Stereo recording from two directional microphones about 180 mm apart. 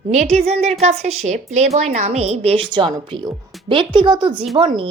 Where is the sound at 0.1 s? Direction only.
40° right (ahead or behind).